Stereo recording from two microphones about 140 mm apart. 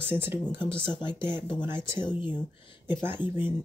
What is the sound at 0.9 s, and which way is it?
Speech, 35° left (ahead or behind).